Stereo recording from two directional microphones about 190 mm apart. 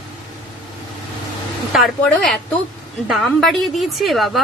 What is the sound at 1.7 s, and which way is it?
A woman's voice, centre (ahead or behind).